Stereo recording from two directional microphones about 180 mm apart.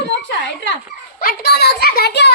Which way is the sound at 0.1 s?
75° left (ahead or behind).